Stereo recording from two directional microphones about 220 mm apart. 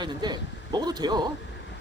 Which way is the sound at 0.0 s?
20° right (ahead or behind).